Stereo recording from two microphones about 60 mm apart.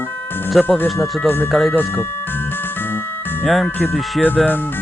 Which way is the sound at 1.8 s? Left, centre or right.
Left.